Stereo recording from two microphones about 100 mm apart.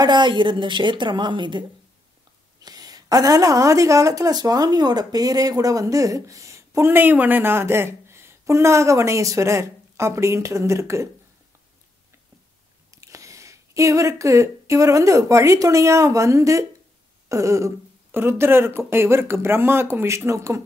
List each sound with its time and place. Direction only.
0.0 s a woman's voice: 50° right (ahead or behind)
2.6 s a woman's voice: 40° right (ahead or behind)
12.9 s speech: 30° right (ahead or behind)